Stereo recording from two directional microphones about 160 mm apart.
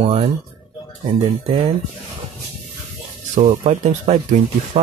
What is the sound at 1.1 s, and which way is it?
Speech, 25° right (ahead or behind).